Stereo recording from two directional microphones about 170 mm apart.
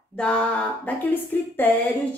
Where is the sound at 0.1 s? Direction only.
5° left (ahead or behind).